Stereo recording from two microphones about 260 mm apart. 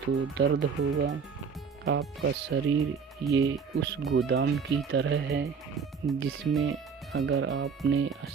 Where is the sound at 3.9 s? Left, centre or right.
Right.